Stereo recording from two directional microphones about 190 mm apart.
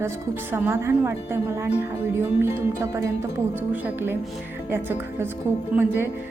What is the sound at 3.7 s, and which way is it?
Music, 10° right (ahead or behind).